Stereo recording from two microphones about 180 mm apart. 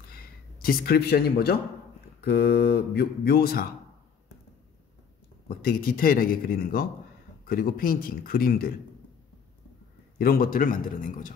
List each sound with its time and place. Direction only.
0.6 s speech: 55° left (ahead or behind)
5.6 s speech: 55° left (ahead or behind)
10.1 s a man's voice: 55° left (ahead or behind)